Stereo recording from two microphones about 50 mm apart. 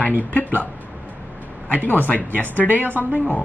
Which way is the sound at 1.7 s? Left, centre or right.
Left.